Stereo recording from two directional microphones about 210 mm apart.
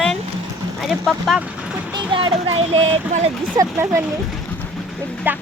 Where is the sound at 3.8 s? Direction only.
5° right (ahead or behind).